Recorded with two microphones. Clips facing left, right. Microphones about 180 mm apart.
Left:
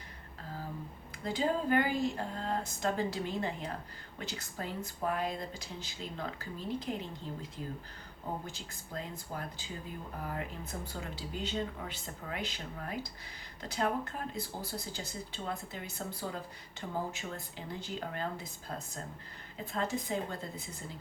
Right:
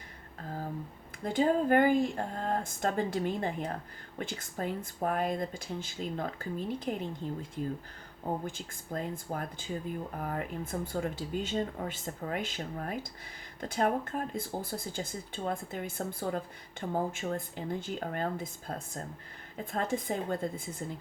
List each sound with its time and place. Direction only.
1.2 s speech: 50° right (ahead or behind)
8.4 s speech: 50° right (ahead or behind)